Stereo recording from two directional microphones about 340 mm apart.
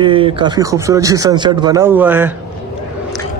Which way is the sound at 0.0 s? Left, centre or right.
Centre.